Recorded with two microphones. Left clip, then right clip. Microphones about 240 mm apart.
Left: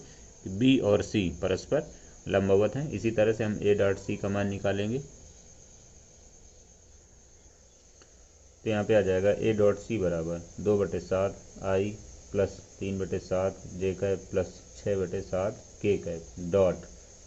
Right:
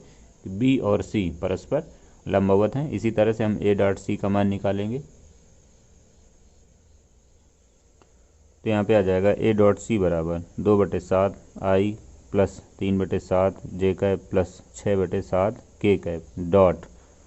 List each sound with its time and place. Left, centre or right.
0.6 s speech: centre
8.6 s speech: right